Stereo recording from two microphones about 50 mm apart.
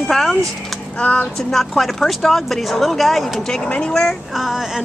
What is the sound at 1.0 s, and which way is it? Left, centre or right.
Speech, left.